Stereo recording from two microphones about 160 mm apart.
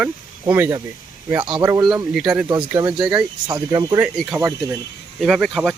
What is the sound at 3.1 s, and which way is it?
Speech, 25° right (ahead or behind).